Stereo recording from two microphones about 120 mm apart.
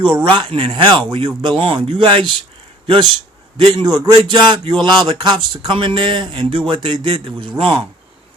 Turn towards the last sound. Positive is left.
turn(degrees=-45)  # may be behind; listen again after turning